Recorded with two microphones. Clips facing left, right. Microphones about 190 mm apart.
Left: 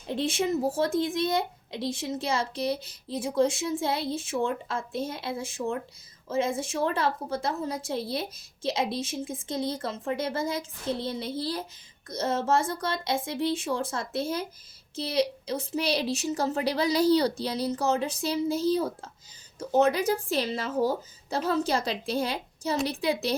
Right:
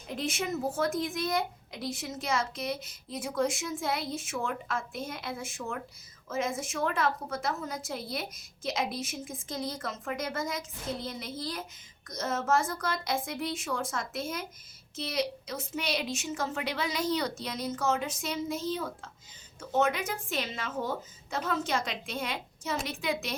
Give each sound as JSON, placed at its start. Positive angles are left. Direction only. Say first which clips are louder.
{"t": 0.1, "sound": "a woman's voice", "louder": "left 6 dB", "side_deg": 30}